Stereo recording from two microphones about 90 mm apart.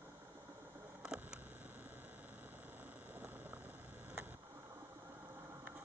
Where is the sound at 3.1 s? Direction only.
20° right (ahead or behind).